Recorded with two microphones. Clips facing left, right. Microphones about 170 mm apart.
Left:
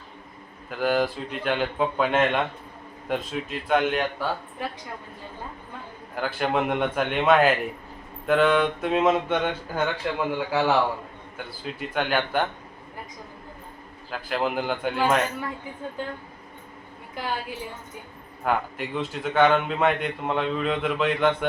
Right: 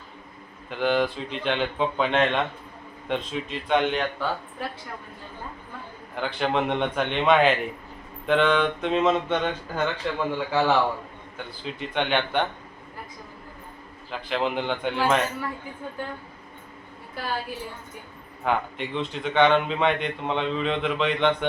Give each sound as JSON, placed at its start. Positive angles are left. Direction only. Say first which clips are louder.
{"t": 0.7, "sound": "a man's voice", "louder": "even", "side_deg": 5}
{"t": 6.1, "sound": "a man's voice", "louder": "even", "side_deg": 5}
{"t": 14.1, "sound": "a man's voice", "louder": "even", "side_deg": 5}
{"t": 16.0, "sound": "speech", "louder": "left 1 dB", "side_deg": 15}
{"t": 17.2, "sound": "speech", "louder": "even", "side_deg": 15}
{"t": 18.4, "sound": "a man's voice", "louder": "even", "side_deg": 5}